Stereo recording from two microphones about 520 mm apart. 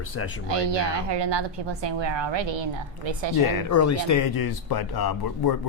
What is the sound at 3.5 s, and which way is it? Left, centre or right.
Speech, left.